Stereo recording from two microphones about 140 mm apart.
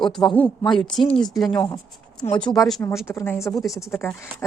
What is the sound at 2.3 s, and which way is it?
Speech, 30° left (ahead or behind).